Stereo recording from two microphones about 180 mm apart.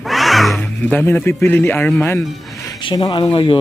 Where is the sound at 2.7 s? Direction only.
25° left (ahead or behind).